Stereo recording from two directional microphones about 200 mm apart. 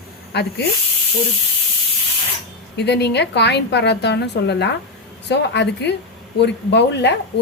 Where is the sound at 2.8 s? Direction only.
55° left (ahead or behind).